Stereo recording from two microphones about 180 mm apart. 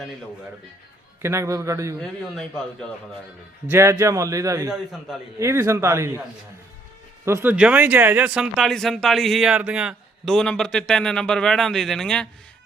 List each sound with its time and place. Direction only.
1.2 s a man's voice: 15° right (ahead or behind)
2.0 s speech: 5° left (ahead or behind)
3.7 s a man's voice: 15° right (ahead or behind)
4.7 s speech: centre (ahead or behind)
5.4 s a man's voice: 15° right (ahead or behind)
7.3 s speech: 10° right (ahead or behind); by 12.3 s 5° left (ahead or behind)